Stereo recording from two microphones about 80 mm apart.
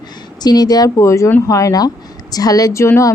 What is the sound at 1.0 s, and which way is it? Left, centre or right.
Speech, left.